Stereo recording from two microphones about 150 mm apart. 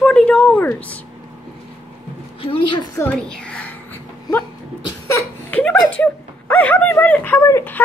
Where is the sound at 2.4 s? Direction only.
35° left (ahead or behind).